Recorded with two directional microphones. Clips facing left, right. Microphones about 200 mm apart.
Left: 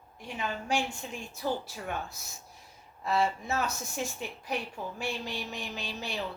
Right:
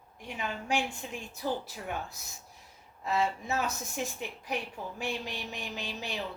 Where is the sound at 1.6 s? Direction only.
20° right (ahead or behind).